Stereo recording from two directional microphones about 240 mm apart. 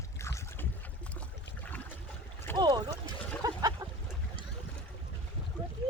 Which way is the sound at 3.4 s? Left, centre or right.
Centre.